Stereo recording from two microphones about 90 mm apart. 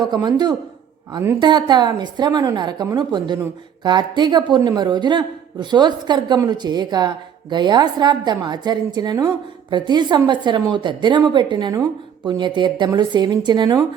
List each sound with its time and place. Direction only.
0.0 s a woman's voice: 50° right (ahead or behind)